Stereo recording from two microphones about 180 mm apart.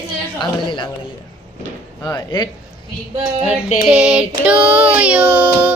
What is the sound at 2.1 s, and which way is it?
Speech, 25° left (ahead or behind).